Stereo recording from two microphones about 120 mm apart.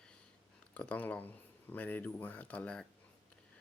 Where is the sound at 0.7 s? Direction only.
10° left (ahead or behind).